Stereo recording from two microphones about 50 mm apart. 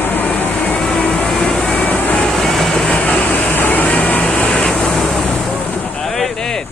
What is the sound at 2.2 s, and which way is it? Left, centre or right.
Vehicle, centre.